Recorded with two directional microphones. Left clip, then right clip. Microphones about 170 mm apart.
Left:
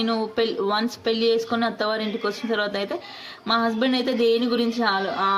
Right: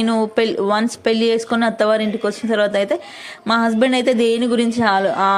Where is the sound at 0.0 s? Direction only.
45° right (ahead or behind).